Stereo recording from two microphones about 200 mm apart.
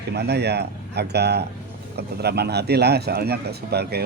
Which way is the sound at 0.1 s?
55° right (ahead or behind).